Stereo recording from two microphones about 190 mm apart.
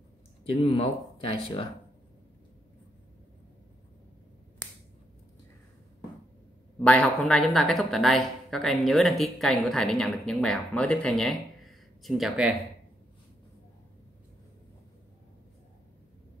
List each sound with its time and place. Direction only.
0.7 s speech: 30° left (ahead or behind)
6.8 s speech: 5° left (ahead or behind)